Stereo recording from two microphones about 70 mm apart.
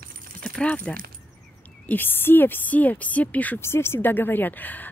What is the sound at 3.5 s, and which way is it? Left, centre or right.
Speech, left.